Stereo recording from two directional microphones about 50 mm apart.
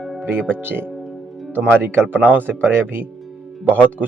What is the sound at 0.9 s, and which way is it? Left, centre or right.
Music, centre.